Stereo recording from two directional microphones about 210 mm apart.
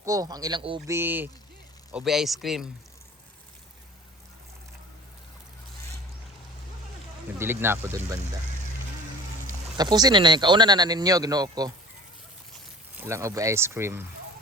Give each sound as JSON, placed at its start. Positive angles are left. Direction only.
{"t": 0.0, "sound": "speech", "side_deg": -15}
{"t": 0.9, "sound": "a man's voice", "side_deg": -10}
{"t": 7.3, "sound": "speech", "side_deg": -10}
{"t": 9.7, "sound": "speech", "side_deg": -20}
{"t": 13.0, "sound": "speech", "side_deg": -15}